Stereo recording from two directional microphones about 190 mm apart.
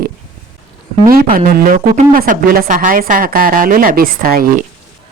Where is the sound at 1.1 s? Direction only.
50° right (ahead or behind).